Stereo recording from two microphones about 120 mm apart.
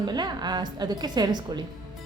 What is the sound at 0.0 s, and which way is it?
A woman's voice, 35° right (ahead or behind).